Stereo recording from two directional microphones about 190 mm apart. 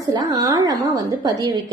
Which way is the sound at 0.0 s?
20° right (ahead or behind).